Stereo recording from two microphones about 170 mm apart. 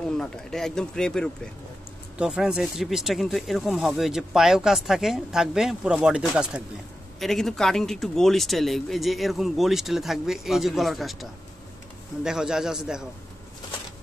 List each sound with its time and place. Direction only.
0.2 s speech: 5° left (ahead or behind)